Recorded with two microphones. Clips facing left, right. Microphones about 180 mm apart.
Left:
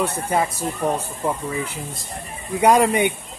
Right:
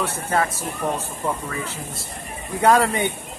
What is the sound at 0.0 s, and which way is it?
Speech, 15° left (ahead or behind).